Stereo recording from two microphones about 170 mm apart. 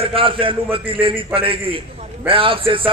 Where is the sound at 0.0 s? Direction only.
30° right (ahead or behind).